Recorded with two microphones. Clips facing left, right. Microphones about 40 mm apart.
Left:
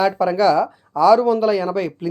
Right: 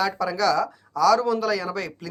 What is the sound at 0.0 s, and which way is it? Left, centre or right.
Speech, left.